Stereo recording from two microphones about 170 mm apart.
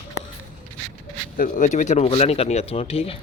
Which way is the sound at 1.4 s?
50° left (ahead or behind).